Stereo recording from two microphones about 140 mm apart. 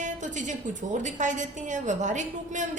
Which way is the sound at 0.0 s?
65° right (ahead or behind).